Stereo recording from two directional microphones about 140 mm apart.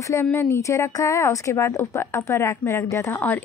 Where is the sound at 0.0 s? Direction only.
20° left (ahead or behind).